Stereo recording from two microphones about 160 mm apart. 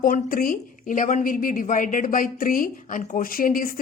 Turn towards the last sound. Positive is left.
turn(degrees=60)  # may be behind; listen again after turning